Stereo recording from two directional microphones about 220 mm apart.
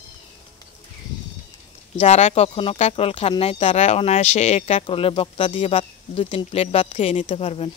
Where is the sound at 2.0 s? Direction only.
30° left (ahead or behind).